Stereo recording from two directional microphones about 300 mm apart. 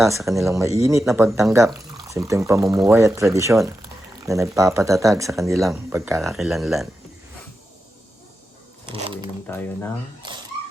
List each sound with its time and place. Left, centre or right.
0.0 s speech: centre
8.9 s speech: centre
9.5 s speech: centre